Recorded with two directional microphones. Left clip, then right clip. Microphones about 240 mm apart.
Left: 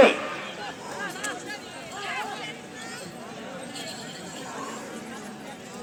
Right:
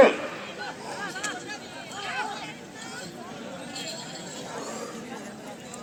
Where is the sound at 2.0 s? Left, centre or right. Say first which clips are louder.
Even; centre.